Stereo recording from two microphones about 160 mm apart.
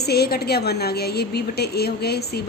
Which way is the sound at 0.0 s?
80° left.